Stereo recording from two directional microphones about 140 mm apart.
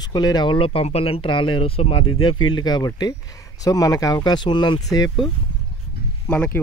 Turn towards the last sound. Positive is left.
turn(degrees=5)  # may be behind; listen again after turning